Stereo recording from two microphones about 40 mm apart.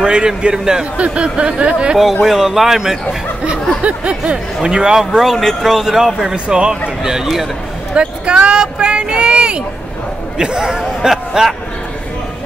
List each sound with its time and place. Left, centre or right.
0.0 s a man's voice: right
2.2 s a man's voice: centre
3.8 s a man's voice: right
6.3 s a man's voice: right
7.9 s speech: right; by 11.5 s centre